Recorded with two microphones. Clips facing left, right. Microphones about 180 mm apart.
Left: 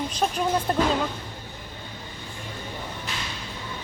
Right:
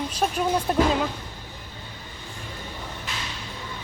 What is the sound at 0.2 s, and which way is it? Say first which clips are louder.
Speech: right 1 dB; 5° right (ahead or behind).